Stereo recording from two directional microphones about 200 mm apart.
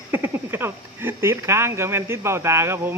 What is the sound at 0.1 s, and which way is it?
Speech, 10° right (ahead or behind).